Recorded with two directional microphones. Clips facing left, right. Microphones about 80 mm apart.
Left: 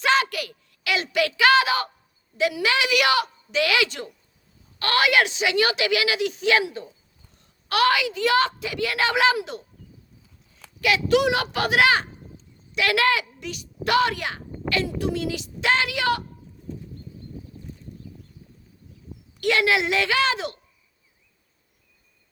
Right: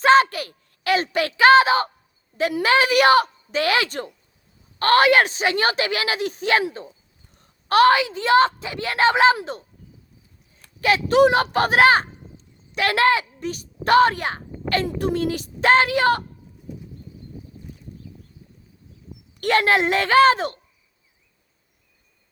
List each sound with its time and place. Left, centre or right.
0.0 s a woman's voice: right
10.8 s a woman's voice: right
19.4 s a child's voice: right